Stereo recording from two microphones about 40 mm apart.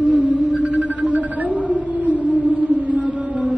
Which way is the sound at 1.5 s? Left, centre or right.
Right.